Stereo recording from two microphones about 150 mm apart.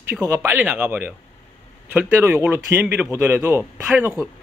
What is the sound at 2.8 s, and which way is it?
Speech, 5° right (ahead or behind).